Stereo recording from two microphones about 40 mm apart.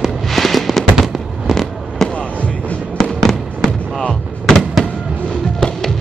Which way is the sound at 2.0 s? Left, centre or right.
Left.